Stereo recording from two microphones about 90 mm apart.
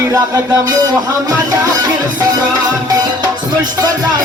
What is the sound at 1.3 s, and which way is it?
Speech, 45° right (ahead or behind).